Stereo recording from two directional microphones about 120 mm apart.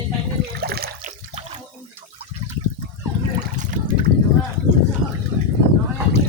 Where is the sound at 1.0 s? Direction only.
90° right.